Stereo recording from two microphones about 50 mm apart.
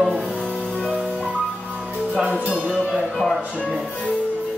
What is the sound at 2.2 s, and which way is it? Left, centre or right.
Speech, right.